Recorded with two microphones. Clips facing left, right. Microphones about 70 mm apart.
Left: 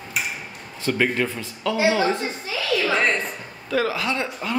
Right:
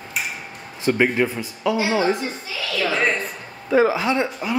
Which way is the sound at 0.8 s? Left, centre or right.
Centre.